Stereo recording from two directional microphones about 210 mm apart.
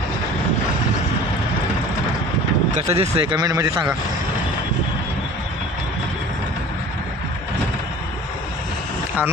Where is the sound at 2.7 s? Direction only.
30° right (ahead or behind); by 4.0 s 15° right (ahead or behind).